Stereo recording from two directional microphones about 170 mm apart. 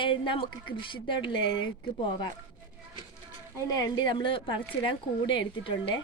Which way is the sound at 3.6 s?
25° left (ahead or behind).